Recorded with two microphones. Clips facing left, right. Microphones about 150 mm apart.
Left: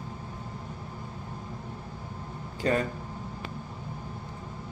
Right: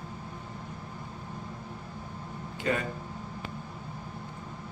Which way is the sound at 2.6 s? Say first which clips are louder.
Left 3 dB; 35° left (ahead or behind).